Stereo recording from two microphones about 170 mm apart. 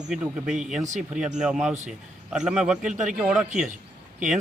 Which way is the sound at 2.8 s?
45° right (ahead or behind).